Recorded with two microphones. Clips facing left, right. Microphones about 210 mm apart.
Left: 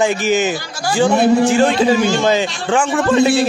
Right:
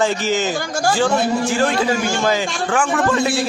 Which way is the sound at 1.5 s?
25° left (ahead or behind).